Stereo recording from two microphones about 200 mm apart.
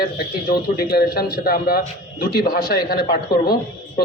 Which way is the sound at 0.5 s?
50° left (ahead or behind).